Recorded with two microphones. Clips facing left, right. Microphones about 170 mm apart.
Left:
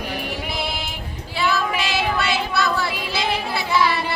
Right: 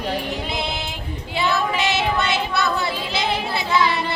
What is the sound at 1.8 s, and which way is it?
Child singing, 20° right (ahead or behind).